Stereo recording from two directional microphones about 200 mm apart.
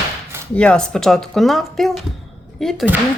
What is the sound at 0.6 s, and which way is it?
A woman's voice, 5° left (ahead or behind).